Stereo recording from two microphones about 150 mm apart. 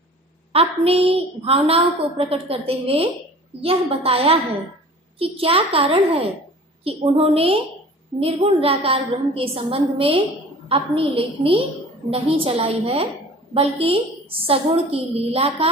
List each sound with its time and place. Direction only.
0.5 s a woman's voice: 40° right (ahead or behind)
5.4 s a woman's voice: 40° right (ahead or behind)